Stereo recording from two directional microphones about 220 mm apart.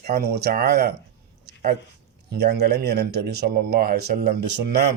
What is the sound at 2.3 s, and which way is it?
Speech, 45° right (ahead or behind).